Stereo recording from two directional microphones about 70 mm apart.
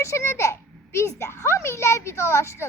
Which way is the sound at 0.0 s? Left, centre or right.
Left.